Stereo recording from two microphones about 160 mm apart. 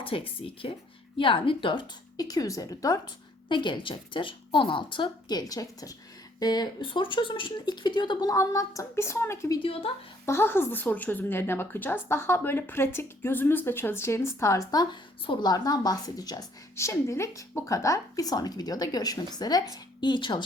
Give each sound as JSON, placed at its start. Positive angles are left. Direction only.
{"t": 0.0, "sound": "a woman's voice", "side_deg": 35}
{"t": 9.6, "sound": "a woman's voice", "side_deg": 35}
{"t": 10.2, "sound": "a woman's voice", "side_deg": 15}